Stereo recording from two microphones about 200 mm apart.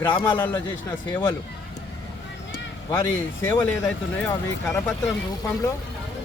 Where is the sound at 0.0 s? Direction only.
20° left (ahead or behind).